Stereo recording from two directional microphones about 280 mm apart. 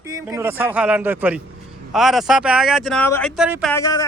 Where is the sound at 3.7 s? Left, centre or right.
Centre.